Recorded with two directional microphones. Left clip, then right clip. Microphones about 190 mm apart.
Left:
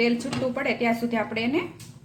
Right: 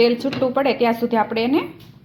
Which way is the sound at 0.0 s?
30° right (ahead or behind).